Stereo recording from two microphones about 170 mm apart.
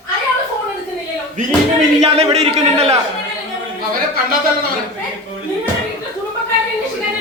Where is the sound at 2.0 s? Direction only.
40° right (ahead or behind).